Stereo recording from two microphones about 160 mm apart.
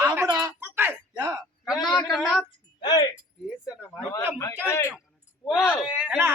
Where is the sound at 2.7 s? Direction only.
25° left (ahead or behind).